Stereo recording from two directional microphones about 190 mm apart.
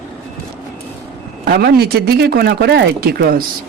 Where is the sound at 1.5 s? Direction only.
55° right (ahead or behind).